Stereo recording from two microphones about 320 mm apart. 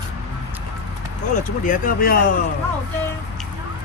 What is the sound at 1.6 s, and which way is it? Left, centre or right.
Speech, left.